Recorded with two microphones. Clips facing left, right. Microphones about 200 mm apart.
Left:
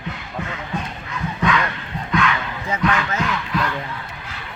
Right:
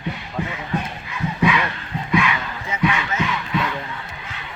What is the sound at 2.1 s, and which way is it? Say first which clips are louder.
Battle cry: even; 5° right (ahead or behind).